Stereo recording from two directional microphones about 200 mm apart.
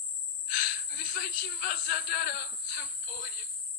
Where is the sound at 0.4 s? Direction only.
45° left (ahead or behind).